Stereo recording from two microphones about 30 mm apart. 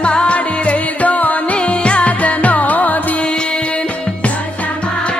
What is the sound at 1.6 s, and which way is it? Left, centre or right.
Music, left.